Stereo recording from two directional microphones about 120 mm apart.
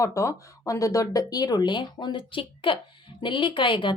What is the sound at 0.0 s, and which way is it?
A woman's voice, 25° left (ahead or behind).